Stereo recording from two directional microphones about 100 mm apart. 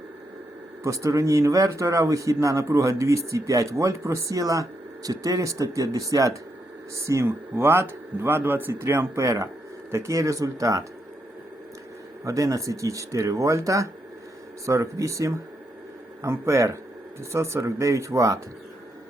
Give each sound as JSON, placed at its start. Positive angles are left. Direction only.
{"t": 0.9, "sound": "speech", "side_deg": -30}
{"t": 12.2, "sound": "speech", "side_deg": -35}